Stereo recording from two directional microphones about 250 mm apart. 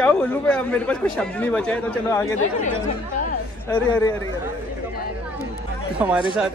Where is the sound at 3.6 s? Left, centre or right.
Centre.